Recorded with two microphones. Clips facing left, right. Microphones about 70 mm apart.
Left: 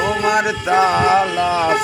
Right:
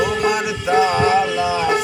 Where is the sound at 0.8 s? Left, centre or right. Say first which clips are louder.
Left 2 dB; left.